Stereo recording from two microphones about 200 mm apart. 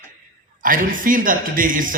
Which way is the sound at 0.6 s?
40° right (ahead or behind).